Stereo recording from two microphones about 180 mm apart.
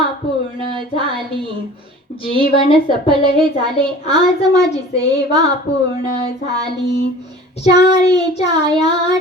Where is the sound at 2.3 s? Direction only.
30° right (ahead or behind).